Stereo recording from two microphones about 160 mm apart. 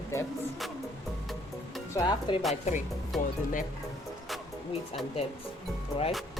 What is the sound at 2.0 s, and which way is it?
Speech, 30° left (ahead or behind).